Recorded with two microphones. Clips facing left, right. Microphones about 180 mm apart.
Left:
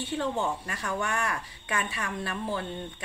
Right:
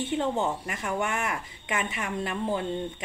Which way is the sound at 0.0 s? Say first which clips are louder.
Right 3 dB; 20° right (ahead or behind).